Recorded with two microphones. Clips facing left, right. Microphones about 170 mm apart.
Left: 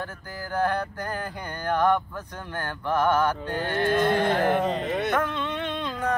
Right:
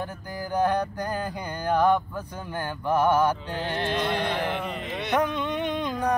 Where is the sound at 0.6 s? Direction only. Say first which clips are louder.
Right 2 dB; 15° right (ahead or behind).